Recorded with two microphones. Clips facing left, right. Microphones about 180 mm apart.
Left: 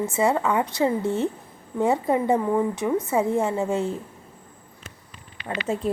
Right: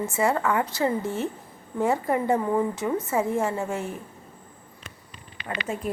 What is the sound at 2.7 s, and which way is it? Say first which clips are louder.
A woman's voice: left 3 dB; 15° left (ahead or behind).